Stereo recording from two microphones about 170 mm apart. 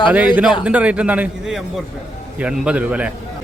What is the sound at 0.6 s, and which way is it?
A man's voice, 5° right (ahead or behind).